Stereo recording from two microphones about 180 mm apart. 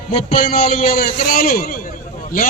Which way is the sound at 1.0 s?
55° left (ahead or behind).